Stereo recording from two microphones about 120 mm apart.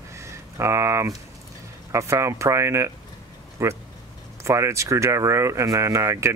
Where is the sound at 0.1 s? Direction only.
25° right (ahead or behind).